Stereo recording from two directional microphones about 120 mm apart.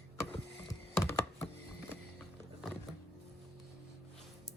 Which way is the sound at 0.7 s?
25° left (ahead or behind).